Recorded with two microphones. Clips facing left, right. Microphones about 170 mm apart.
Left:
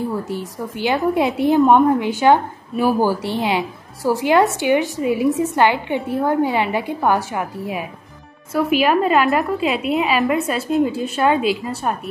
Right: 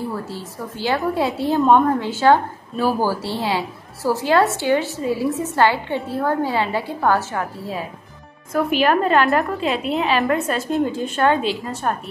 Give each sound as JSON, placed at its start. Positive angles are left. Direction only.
{"t": 0.1, "sound": "a woman's voice", "side_deg": 15}